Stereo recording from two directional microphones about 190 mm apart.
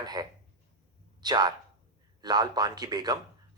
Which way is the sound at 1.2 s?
20° right (ahead or behind).